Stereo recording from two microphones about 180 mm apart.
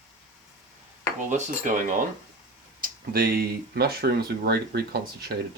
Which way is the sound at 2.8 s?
55° right (ahead or behind).